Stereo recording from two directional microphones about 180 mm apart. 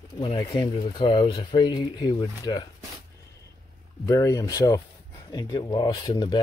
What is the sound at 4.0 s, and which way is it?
Speech, 15° left (ahead or behind).